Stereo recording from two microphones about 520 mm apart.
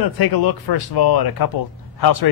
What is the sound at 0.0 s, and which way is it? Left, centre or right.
Speech, left.